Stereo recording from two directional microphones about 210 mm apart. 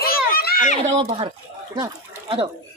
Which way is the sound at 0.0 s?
45° left (ahead or behind).